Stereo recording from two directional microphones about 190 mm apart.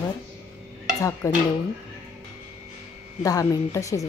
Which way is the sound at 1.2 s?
15° left (ahead or behind).